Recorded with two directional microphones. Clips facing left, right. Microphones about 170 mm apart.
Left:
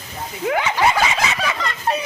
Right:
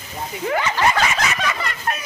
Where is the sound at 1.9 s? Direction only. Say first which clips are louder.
Left 5 dB; 25° left (ahead or behind).